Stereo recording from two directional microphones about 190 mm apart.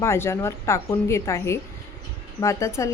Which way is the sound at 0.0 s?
15° left (ahead or behind).